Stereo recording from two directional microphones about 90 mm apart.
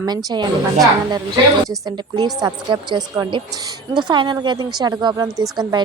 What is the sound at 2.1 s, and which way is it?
A woman's voice, 50° right (ahead or behind).